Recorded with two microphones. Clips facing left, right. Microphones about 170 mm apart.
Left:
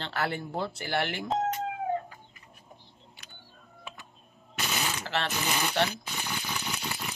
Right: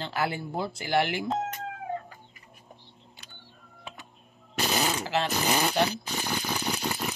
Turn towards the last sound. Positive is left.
turn(degrees=-40)  # may be behind; listen again after turning